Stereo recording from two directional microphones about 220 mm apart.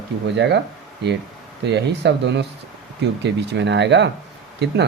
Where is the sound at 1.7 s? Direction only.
50° right (ahead or behind).